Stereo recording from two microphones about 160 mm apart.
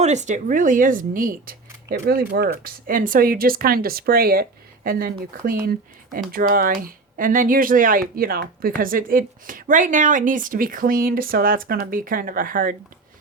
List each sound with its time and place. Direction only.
0.0 s speech: 45° right (ahead or behind)